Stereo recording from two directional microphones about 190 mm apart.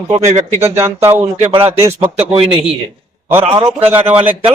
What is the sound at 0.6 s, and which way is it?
Speech, 15° right (ahead or behind).